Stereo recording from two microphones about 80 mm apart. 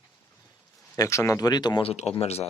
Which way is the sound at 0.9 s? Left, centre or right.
Left.